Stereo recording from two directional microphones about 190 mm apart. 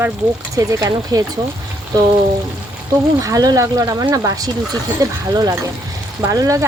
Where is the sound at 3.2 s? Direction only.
20° right (ahead or behind).